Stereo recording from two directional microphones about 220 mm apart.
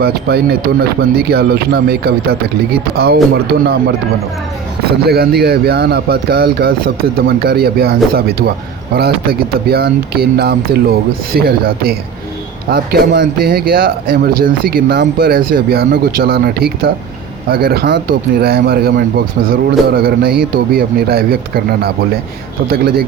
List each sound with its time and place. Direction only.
0.0 s speech: 45° right (ahead or behind)
4.9 s speech: 45° right (ahead or behind)